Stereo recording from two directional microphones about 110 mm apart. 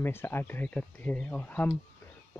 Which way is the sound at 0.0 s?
20° left (ahead or behind).